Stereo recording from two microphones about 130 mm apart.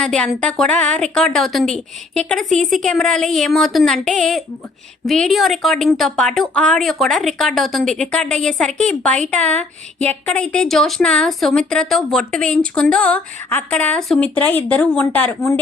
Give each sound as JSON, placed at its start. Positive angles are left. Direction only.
{"t": 0.0, "sound": "a woman's voice", "side_deg": 5}
{"t": 9.4, "sound": "speech", "side_deg": -60}
{"t": 10.0, "sound": "a woman's voice", "side_deg": 10}